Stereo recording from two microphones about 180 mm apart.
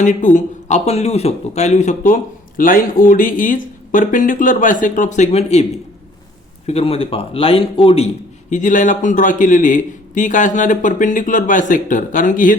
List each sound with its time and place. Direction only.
0.0 s speech: 45° left (ahead or behind)
2.6 s a man's voice: 50° left (ahead or behind)